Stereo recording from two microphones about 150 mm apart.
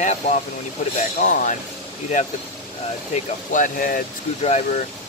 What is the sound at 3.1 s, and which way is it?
Speech, 60° left (ahead or behind).